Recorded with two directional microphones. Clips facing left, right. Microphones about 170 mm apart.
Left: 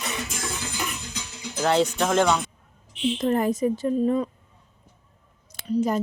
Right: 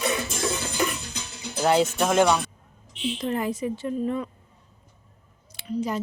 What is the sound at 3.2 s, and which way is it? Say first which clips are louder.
A woman's voice: left 5 dB; 45° left (ahead or behind).